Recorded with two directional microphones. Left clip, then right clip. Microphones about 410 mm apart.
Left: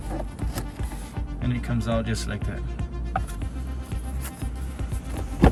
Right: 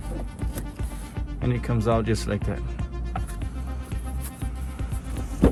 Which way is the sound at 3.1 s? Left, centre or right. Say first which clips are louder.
Left 6 dB; centre.